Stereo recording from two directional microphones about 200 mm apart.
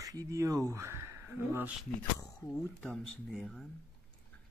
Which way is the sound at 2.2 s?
5° left (ahead or behind).